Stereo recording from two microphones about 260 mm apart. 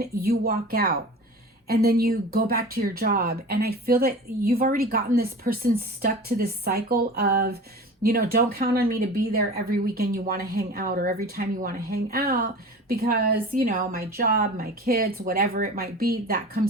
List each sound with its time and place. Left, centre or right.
0.0 s speech: right